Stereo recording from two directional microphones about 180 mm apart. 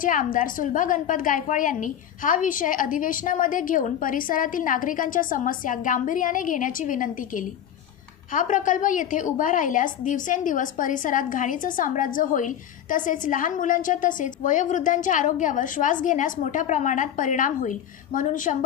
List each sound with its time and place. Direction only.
0.0 s a woman's voice: 50° left (ahead or behind)